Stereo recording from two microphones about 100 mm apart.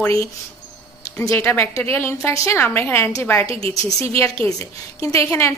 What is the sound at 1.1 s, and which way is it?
A woman's voice, 25° left (ahead or behind).